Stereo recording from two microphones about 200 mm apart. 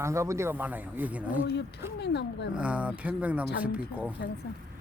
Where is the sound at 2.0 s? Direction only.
55° left (ahead or behind).